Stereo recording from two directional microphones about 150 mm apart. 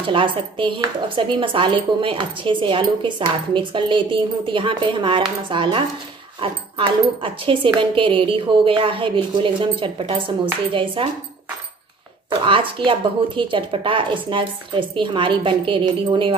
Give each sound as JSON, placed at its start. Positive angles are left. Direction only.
{"t": 0.0, "sound": "speech", "side_deg": -35}
{"t": 12.3, "sound": "speech", "side_deg": -35}